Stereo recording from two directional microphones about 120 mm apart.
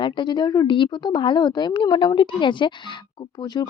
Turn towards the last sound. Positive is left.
turn(degrees=35)  # may be behind; listen again after turning